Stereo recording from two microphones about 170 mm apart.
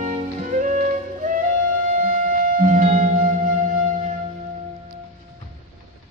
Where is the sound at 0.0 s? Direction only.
45° right (ahead or behind).